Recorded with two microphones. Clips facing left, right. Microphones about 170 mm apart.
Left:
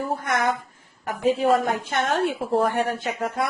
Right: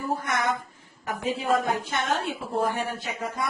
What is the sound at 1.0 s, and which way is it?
A woman's voice, 50° left (ahead or behind).